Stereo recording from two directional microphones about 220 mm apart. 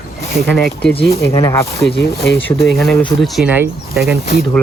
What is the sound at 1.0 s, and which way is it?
Speech, 15° left (ahead or behind).